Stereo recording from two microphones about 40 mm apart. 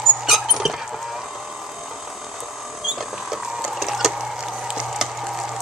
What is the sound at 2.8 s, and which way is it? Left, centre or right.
Mechanisms, centre.